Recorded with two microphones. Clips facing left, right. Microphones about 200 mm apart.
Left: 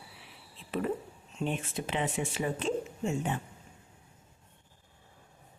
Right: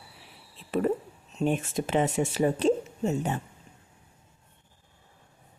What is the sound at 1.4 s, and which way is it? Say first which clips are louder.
Speech: right 7 dB; 45° right (ahead or behind).